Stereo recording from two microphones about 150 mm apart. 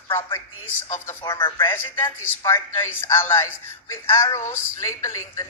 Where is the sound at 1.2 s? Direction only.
30° left (ahead or behind).